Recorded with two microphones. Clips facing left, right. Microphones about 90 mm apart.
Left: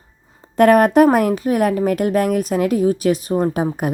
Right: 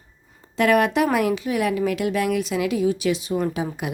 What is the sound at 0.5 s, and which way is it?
Speech, 45° left (ahead or behind).